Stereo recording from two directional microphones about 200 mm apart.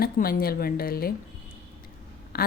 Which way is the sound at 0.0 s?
45° left (ahead or behind).